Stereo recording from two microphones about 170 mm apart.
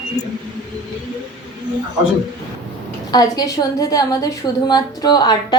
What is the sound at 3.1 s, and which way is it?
Speech, 25° left (ahead or behind).